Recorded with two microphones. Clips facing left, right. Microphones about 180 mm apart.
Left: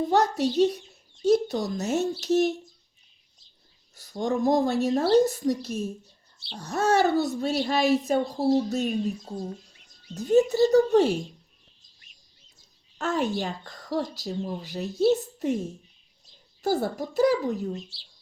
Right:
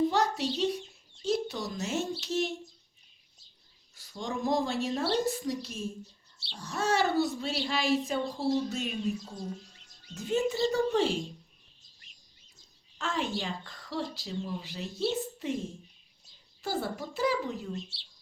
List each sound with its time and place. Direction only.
0.1 s a woman's voice: 45° left (ahead or behind)
3.9 s a woman's voice: 40° left (ahead or behind)
10.2 s a woman's voice: 40° left (ahead or behind)
13.0 s a woman's voice: 40° left (ahead or behind)
16.6 s a woman's voice: 40° left (ahead or behind)